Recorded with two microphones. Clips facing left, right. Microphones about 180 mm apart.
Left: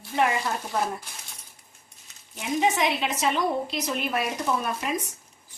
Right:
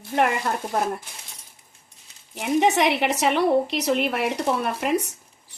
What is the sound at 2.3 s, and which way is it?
A woman's voice, 70° right (ahead or behind).